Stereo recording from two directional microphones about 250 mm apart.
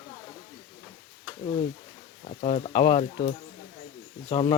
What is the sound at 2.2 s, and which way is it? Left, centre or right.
Speech, left.